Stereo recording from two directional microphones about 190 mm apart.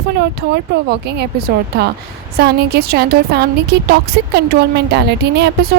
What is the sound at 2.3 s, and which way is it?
A woman's voice, 60° right (ahead or behind).